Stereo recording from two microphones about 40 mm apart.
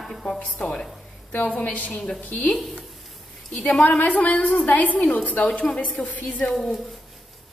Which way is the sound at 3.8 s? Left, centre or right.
Left.